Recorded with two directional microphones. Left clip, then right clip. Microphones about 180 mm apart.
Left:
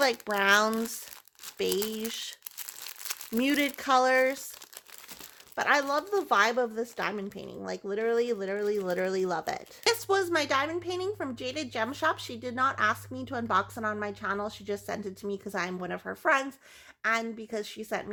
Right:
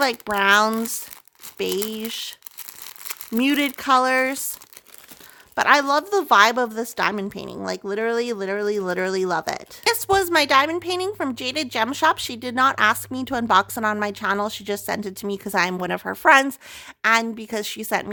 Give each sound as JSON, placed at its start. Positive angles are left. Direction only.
{"t": 0.0, "sound": "speech", "side_deg": -30}
{"t": 2.8, "sound": "crumpling", "side_deg": -15}
{"t": 3.3, "sound": "a woman's voice", "side_deg": -30}
{"t": 5.5, "sound": "a woman's voice", "side_deg": -35}